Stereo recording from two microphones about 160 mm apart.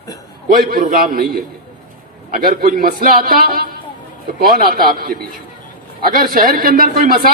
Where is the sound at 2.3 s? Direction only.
65° right (ahead or behind).